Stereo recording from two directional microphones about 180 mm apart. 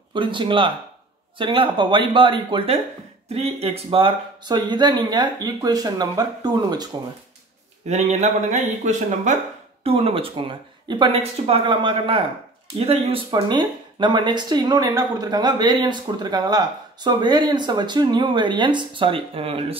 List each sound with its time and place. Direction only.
0.1 s speech: 25° right (ahead or behind)
7.9 s speech: 40° right (ahead or behind)